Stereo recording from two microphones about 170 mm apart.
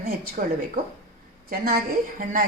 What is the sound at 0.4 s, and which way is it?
A woman's voice, 55° right (ahead or behind).